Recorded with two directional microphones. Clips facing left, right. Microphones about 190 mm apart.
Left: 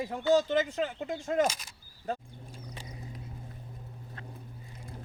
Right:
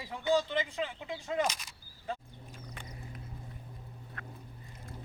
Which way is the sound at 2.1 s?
45° left (ahead or behind).